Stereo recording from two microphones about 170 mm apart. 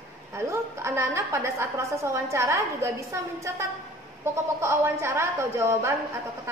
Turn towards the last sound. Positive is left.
turn(degrees=-15)  # may be behind; listen again after turning